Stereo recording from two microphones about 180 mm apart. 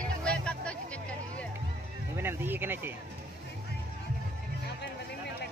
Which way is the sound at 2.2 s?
10° right (ahead or behind).